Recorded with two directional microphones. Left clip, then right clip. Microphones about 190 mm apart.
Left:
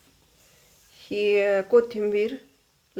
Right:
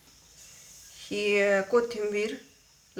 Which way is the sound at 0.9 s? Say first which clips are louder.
Left 4 dB; 45° left (ahead or behind).